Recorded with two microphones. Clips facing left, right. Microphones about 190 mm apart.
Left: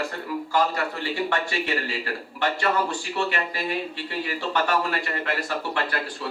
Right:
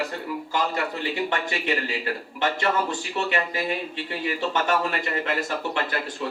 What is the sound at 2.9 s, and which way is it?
Speech, 20° right (ahead or behind).